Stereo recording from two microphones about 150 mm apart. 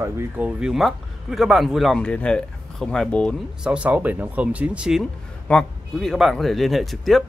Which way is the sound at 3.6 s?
5° right (ahead or behind).